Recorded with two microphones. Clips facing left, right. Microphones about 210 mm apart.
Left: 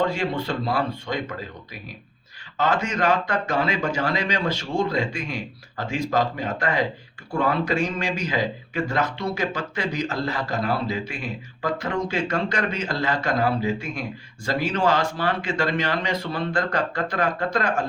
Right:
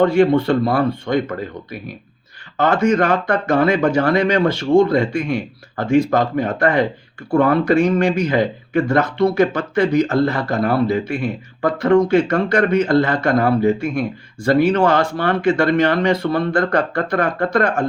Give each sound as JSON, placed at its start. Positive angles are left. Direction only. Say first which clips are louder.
{"t": 0.0, "sound": "speech", "louder": "right 11 dB", "side_deg": -55}
{"t": 2.6, "sound": "speech", "louder": "right 8 dB", "side_deg": -55}